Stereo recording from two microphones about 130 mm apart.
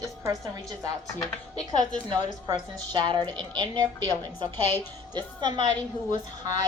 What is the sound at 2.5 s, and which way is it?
A woman's voice, 30° right (ahead or behind).